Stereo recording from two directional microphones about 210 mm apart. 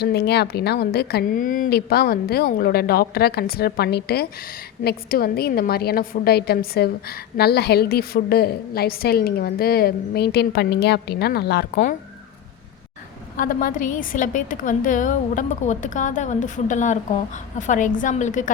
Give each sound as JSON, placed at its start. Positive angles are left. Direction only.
{"t": 0.0, "sound": "a woman's voice", "side_deg": 50}
{"t": 13.3, "sound": "a woman's voice", "side_deg": 40}